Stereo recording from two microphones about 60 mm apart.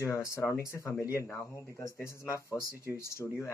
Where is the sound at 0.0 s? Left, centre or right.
Left.